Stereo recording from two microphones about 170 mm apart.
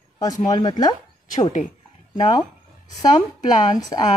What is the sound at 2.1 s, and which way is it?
Speech, 25° left (ahead or behind).